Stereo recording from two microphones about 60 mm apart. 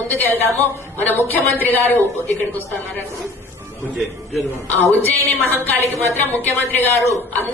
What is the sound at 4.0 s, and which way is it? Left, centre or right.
Speech, centre.